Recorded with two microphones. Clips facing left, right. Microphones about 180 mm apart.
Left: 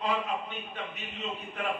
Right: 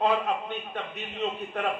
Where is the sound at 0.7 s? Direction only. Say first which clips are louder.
Right 4 dB; 60° right (ahead or behind).